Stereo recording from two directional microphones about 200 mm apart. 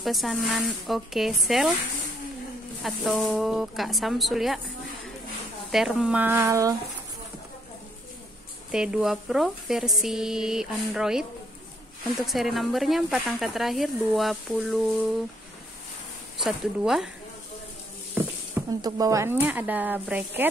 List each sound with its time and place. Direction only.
0.0 s speech: centre (ahead or behind)
2.8 s speech: centre (ahead or behind)
5.7 s speech: centre (ahead or behind)
8.7 s speech: 5° right (ahead or behind)
16.3 s speech: centre (ahead or behind)
18.1 s speech: 15° right (ahead or behind)